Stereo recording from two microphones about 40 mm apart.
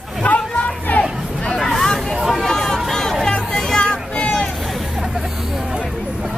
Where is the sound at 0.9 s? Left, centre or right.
Left.